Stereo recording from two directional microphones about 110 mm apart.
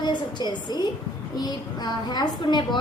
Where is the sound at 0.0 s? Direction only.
40° left (ahead or behind).